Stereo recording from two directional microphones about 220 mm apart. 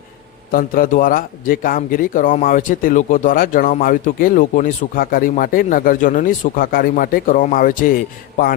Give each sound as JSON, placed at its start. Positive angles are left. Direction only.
{"t": 0.5, "sound": "a man's voice", "side_deg": 40}